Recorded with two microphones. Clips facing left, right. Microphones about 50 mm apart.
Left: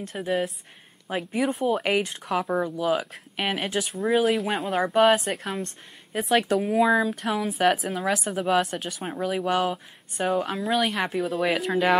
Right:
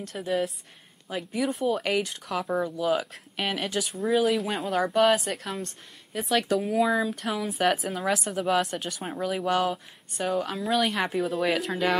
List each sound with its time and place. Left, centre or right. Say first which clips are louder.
0.0 s a woman's voice: left 1 dB; centre
1.0 s a woman's voice: left 3 dB; left
3.9 s speech: left 1 dB; centre
4.9 s speech: left 3 dB; left
5.3 s a woman's voice: left 3 dB; centre
6.1 s speech: left 4 dB; left
6.7 s a woman's voice: left 5 dB; centre
10.5 s speech: left 1 dB; centre